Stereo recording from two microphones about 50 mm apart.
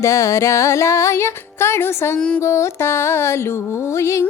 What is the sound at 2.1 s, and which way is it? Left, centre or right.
Speech, centre.